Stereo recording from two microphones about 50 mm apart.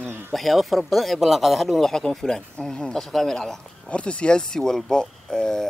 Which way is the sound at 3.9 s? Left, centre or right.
Left.